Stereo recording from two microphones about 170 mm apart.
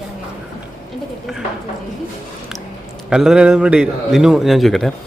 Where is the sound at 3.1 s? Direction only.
5° right (ahead or behind).